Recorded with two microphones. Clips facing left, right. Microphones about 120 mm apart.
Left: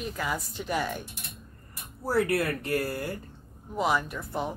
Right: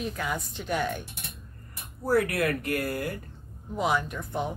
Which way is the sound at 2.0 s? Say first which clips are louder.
Right 1 dB; 30° left (ahead or behind).